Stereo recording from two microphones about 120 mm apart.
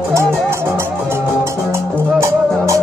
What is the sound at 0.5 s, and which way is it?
Music, 20° right (ahead or behind).